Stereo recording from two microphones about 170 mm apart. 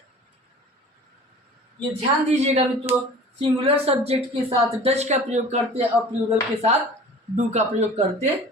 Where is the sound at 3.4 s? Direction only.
35° right (ahead or behind).